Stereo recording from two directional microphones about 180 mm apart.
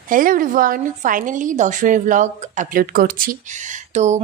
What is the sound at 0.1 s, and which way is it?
A woman's voice, 50° right (ahead or behind).